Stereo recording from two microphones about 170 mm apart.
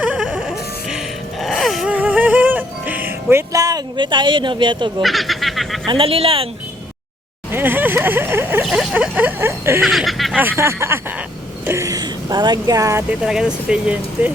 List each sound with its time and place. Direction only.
0.0 s music: 5° right (ahead or behind); by 5.0 s 30° right (ahead or behind)
5.0 s a sound: centre (ahead or behind)
5.9 s speech: 35° right (ahead or behind)
7.5 s speech: 10° right (ahead or behind)
8.6 s a sound: 5° right (ahead or behind)
9.8 s speech: centre (ahead or behind)
10.6 s speech: 15° right (ahead or behind)